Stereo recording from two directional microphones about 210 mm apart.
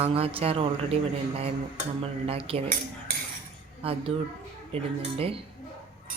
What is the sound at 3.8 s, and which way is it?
Speech, 25° right (ahead or behind).